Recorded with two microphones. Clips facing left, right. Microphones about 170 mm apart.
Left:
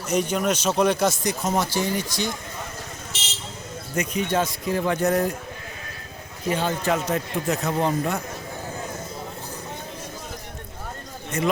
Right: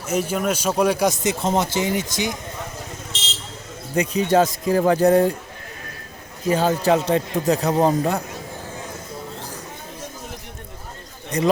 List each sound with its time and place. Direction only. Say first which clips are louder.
0.0 s speech: right 1 dB; 5° right (ahead or behind)
3.9 s speech: right 6 dB; 40° right (ahead or behind)
6.5 s speech: right 5 dB; 35° right (ahead or behind)
11.3 s a man's voice: right 5 dB; 35° right (ahead or behind)